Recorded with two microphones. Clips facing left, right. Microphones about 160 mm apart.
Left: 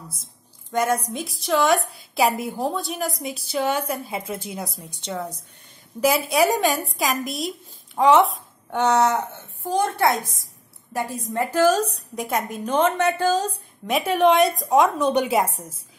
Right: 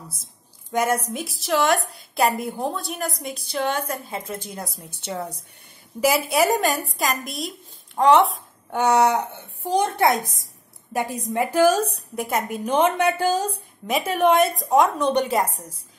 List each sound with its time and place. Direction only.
0.7 s a woman's voice: 10° right (ahead or behind); by 4.2 s 10° left (ahead or behind)
4.8 s a woman's voice: 5° right (ahead or behind)
8.8 s a woman's voice: 10° right (ahead or behind)
13.8 s a woman's voice: centre (ahead or behind)